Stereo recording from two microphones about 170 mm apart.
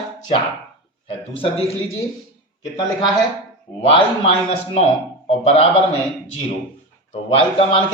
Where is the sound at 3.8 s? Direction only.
30° left (ahead or behind).